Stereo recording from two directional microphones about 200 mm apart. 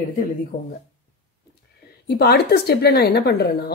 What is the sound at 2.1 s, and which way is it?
Speech, 50° left (ahead or behind).